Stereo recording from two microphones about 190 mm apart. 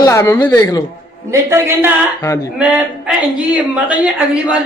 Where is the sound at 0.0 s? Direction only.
15° left (ahead or behind).